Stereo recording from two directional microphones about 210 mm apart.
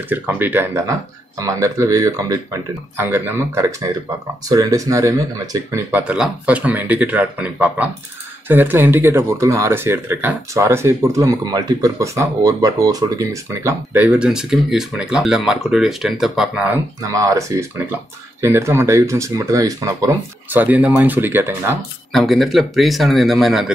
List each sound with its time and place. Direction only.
0.1 s speech: 10° right (ahead or behind)
22.1 s speech: centre (ahead or behind)